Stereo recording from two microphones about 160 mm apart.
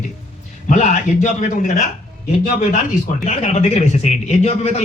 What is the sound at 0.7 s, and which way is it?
Speech, 50° left (ahead or behind).